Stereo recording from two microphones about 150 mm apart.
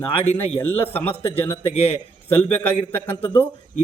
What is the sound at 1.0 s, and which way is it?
A man's voice, 40° left (ahead or behind).